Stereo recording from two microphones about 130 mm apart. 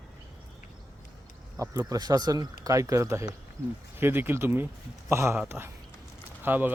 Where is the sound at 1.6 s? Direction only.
25° right (ahead or behind).